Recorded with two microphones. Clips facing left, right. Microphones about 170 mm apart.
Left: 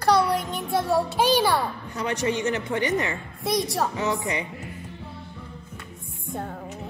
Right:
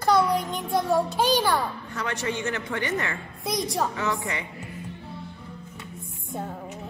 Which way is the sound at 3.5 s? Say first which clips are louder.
Left 2 dB; centre (ahead or behind).